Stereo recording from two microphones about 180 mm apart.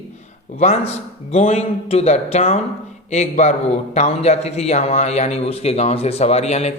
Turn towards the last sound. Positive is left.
turn(degrees=35)  # may be behind; listen again after turning